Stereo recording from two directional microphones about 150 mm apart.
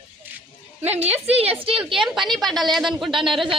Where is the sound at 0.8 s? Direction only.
45° right (ahead or behind).